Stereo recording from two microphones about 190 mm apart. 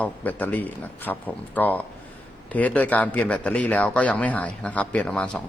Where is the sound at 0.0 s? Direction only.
10° left (ahead or behind).